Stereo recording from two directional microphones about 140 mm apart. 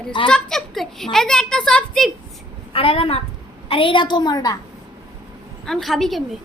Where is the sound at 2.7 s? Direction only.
40° left (ahead or behind).